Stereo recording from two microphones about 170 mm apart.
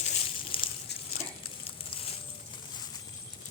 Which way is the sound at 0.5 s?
30° left (ahead or behind).